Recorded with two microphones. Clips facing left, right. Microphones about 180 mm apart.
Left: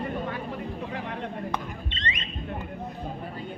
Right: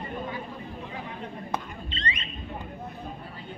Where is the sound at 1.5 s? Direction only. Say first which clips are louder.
Left 1 dB; 30° right (ahead or behind).